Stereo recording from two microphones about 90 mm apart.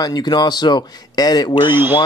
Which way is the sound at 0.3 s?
55° left (ahead or behind).